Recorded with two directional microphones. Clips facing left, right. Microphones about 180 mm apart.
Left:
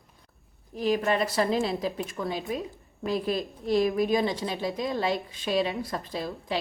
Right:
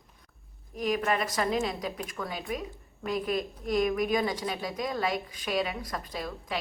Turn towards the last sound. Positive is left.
turn(degrees=30)  # may be behind; listen again after turning